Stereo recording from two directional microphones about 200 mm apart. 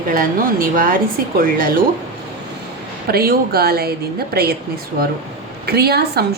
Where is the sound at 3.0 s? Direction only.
50° right (ahead or behind).